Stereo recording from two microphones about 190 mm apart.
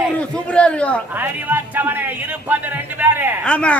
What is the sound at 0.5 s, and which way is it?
Speech, 5° left (ahead or behind).